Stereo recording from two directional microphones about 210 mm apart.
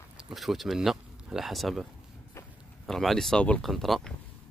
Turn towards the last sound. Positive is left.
turn(degrees=0)  # may be behind; listen again after turning